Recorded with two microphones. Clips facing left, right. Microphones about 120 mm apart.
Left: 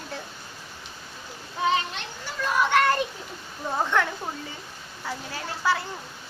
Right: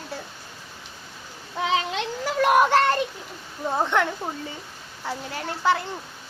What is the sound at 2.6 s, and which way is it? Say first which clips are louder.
Speech: right 2 dB; 30° right (ahead or behind).